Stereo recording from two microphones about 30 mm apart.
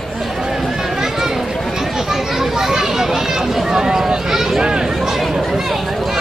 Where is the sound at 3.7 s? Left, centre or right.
Right.